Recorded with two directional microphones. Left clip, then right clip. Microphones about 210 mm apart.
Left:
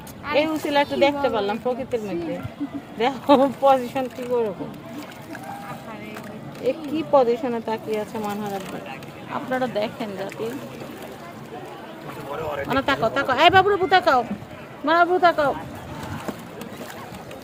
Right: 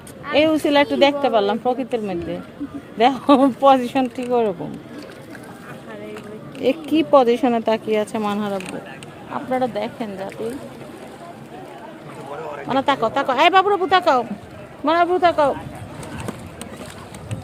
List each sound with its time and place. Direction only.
0.3 s a woman's voice: 50° right (ahead or behind)
6.6 s a woman's voice: 55° right (ahead or behind)
9.3 s speech: 20° right (ahead or behind)
12.4 s a sound: 45° left (ahead or behind)
12.6 s speech: 20° right (ahead or behind)